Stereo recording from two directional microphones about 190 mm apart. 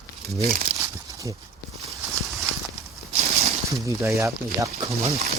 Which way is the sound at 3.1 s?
35° right (ahead or behind).